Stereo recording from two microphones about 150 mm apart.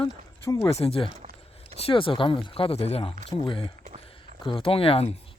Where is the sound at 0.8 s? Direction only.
40° left (ahead or behind).